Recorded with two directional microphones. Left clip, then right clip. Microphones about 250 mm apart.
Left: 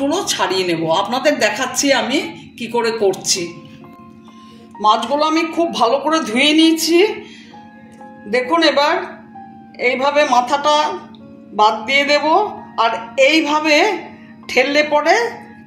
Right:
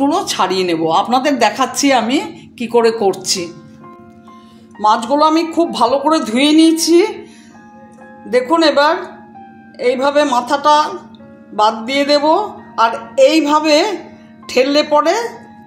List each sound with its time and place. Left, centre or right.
0.1 s a woman's voice: right
4.8 s a woman's voice: right
8.3 s a woman's voice: right